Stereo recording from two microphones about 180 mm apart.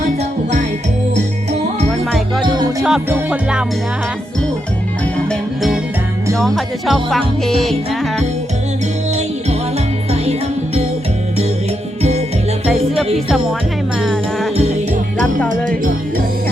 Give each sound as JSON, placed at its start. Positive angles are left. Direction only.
{"t": 2.5, "sound": "music", "side_deg": -20}
{"t": 2.8, "sound": "music", "side_deg": -10}
{"t": 5.3, "sound": "music", "side_deg": 0}
{"t": 14.0, "sound": "music", "side_deg": 0}